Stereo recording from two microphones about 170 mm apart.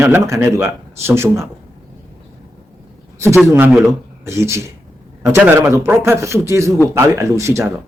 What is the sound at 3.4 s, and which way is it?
Speech, 15° right (ahead or behind).